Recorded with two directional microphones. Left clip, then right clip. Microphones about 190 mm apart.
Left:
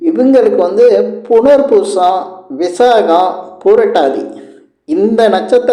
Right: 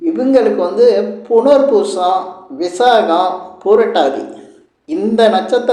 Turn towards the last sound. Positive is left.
turn(degrees=40)  # may be behind; listen again after turning